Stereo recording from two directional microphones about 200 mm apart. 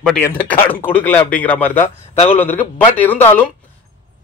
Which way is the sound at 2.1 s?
30° left (ahead or behind).